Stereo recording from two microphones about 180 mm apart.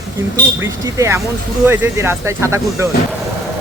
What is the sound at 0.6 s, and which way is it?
Speech, 15° right (ahead or behind).